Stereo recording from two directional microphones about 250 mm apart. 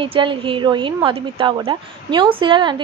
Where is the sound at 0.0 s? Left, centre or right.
Centre.